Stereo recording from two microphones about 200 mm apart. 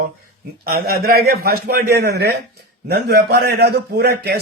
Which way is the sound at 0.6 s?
50° right (ahead or behind).